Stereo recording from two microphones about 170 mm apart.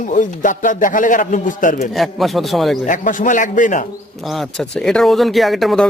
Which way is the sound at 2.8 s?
50° left (ahead or behind).